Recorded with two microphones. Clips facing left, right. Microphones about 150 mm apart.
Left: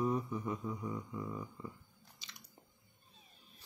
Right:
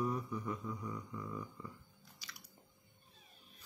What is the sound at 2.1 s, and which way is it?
Chewing, 25° left (ahead or behind).